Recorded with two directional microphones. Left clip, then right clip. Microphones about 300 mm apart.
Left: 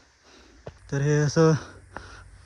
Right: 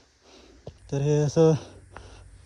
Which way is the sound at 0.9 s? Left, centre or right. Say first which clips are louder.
Even; centre.